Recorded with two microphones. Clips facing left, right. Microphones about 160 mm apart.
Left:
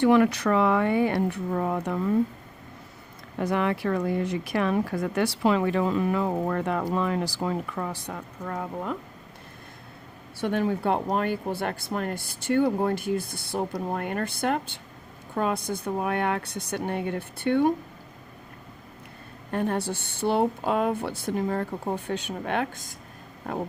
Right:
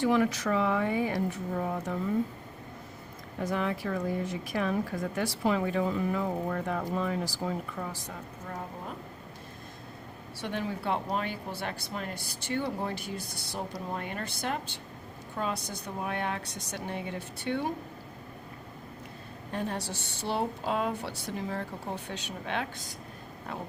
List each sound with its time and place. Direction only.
0.0 s speech: 65° left (ahead or behind)
3.3 s speech: 70° left (ahead or behind)
10.4 s speech: 50° left (ahead or behind)
19.5 s speech: 55° left (ahead or behind)